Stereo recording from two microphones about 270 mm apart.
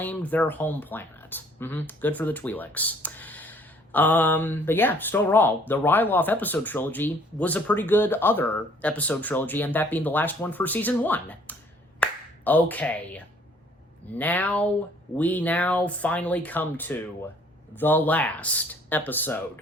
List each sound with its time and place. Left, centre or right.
0.0 s speech: centre
12.0 s finger snapping: centre
12.5 s speech: centre